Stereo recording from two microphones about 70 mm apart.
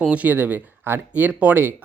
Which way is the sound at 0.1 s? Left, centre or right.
Right.